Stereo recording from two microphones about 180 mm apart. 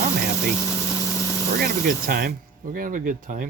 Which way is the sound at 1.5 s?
55° right (ahead or behind).